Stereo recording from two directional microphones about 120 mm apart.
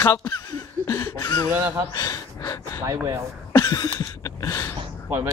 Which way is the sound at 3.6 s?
30° left (ahead or behind).